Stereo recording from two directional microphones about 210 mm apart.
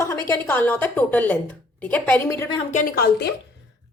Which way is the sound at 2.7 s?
40° left (ahead or behind).